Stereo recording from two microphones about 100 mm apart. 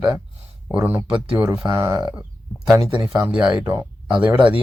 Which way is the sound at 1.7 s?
25° right (ahead or behind).